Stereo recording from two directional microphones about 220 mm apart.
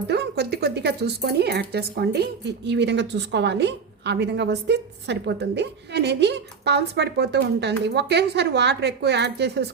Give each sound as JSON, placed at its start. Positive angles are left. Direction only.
{"t": 0.1, "sound": "speech", "side_deg": -50}